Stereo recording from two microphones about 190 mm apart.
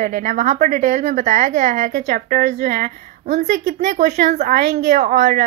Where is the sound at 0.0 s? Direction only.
45° right (ahead or behind).